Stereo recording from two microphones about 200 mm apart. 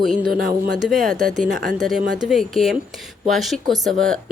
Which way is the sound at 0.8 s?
Centre (ahead or behind).